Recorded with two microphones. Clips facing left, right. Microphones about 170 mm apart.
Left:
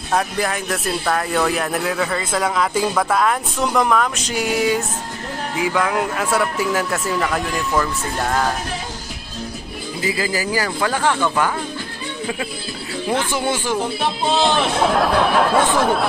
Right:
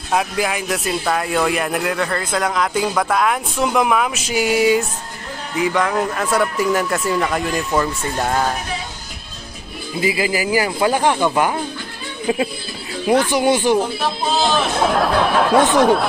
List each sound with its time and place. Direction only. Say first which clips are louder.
0.1 s speech: right 1 dB; 5° right (ahead or behind)
9.9 s speech: right 3 dB; 15° right (ahead or behind)
13.1 s speech: right 6 dB; 15° right (ahead or behind)
14.4 s speech: even; centre (ahead or behind)